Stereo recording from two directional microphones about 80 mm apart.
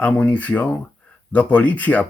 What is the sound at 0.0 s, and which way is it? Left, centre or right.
Speech, left.